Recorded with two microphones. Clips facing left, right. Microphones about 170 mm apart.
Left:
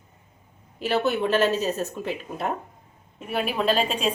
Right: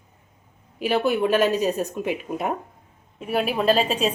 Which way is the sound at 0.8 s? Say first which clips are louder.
Right 2 dB; 10° right (ahead or behind).